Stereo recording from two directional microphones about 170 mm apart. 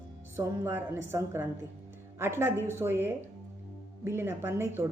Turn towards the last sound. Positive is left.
turn(degrees=-15)  # may be behind; listen again after turning